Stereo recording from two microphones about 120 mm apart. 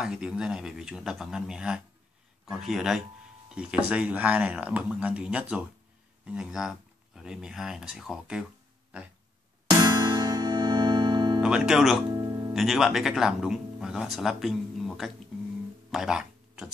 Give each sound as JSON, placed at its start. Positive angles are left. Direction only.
{"t": 0.0, "sound": "speech", "side_deg": -5}
{"t": 9.8, "sound": "music", "side_deg": -35}
{"t": 11.4, "sound": "speech", "side_deg": -5}
{"t": 12.1, "sound": "music", "side_deg": -30}
{"t": 12.5, "sound": "speech", "side_deg": 0}
{"t": 15.9, "sound": "a sound", "side_deg": -5}